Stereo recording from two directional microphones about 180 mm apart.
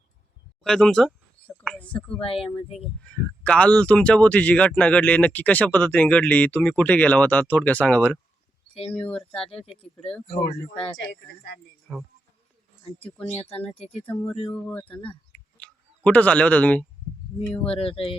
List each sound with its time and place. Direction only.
0.6 s speech: 5° left (ahead or behind)
2.1 s speech: 30° left (ahead or behind)
3.0 s speech: 5° left (ahead or behind)
9.6 s speech: 30° left (ahead or behind)
10.2 s speech: 55° left (ahead or behind)
11.9 s speech: 5° left (ahead or behind)
13.3 s speech: 30° left (ahead or behind)
14.0 s speech: 10° left (ahead or behind)
17.7 s speech: 30° left (ahead or behind)